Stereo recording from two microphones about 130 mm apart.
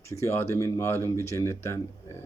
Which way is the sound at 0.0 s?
20° left (ahead or behind).